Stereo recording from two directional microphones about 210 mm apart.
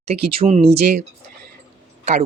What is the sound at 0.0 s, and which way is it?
Speech, 30° right (ahead or behind).